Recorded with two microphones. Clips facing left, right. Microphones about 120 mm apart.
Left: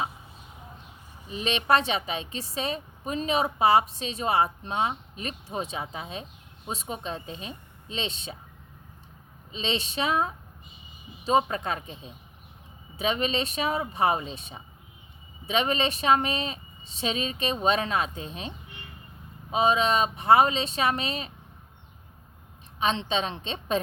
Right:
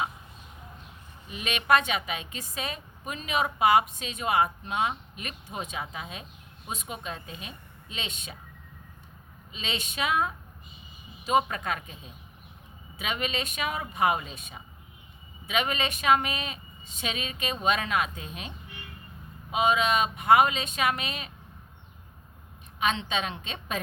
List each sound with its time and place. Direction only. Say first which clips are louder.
1.3 s a woman's voice: left 1 dB; 30° left (ahead or behind)
9.5 s a woman's voice: left 5 dB; 30° left (ahead or behind)
22.8 s a woman's voice: left 2 dB; 30° left (ahead or behind)